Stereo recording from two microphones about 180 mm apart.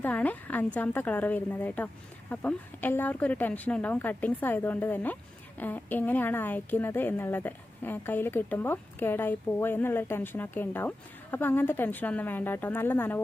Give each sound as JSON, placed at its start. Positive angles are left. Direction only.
{"t": 0.0, "sound": "a woman's voice", "side_deg": 10}